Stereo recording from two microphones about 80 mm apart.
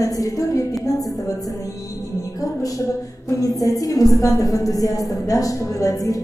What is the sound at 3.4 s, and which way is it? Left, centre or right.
A woman's voice, left.